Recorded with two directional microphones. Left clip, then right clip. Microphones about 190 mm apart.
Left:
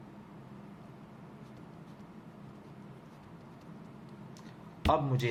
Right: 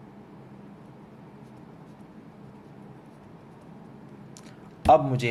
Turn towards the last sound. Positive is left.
turn(degrees=-25)  # may be behind; listen again after turning